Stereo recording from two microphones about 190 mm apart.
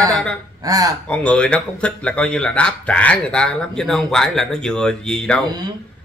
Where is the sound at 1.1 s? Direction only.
5° left (ahead or behind).